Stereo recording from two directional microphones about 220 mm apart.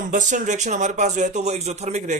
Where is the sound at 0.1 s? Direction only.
35° right (ahead or behind).